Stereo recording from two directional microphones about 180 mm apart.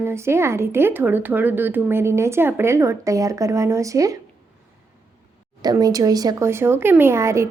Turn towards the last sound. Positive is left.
turn(degrees=-15)  # may be behind; listen again after turning